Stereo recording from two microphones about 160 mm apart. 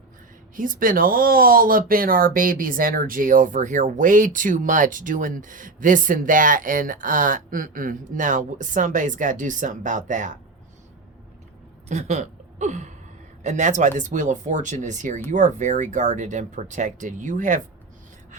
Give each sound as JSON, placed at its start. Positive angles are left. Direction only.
{"t": 0.5, "sound": "speech", "side_deg": -60}
{"t": 11.9, "sound": "speech", "side_deg": -45}